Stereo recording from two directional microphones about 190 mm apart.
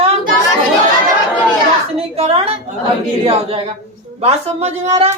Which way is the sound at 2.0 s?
30° right (ahead or behind).